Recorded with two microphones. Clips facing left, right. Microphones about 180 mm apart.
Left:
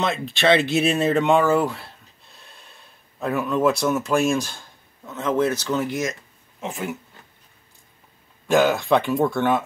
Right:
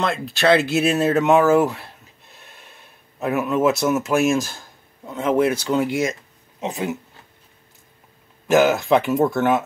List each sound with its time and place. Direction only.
0.0 s speech: centre (ahead or behind)
3.2 s speech: 5° right (ahead or behind)
8.5 s speech: centre (ahead or behind)